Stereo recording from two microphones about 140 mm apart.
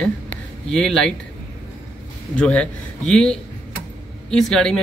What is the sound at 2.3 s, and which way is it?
A man's voice, 10° left (ahead or behind).